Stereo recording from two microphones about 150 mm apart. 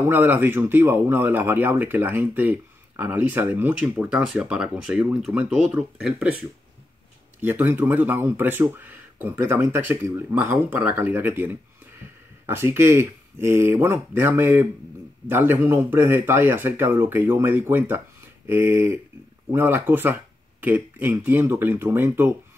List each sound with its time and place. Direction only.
0.1 s speech: 15° right (ahead or behind)
7.4 s speech: 15° right (ahead or behind)